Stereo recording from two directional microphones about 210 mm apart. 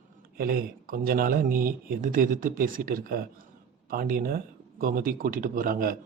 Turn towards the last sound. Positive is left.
turn(degrees=-40)  # may be behind; listen again after turning